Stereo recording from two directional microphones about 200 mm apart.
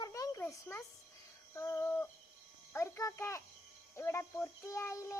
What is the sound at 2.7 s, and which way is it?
A child's voice, 15° left (ahead or behind).